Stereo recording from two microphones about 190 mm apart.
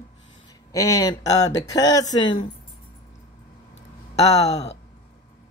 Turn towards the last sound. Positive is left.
turn(degrees=35)  # may be behind; listen again after turning